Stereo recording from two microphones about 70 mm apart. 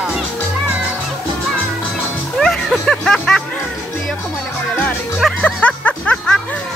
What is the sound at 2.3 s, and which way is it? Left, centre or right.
Music, centre.